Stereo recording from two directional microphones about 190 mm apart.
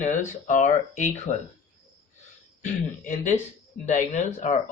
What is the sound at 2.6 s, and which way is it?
A man's voice, 45° left (ahead or behind).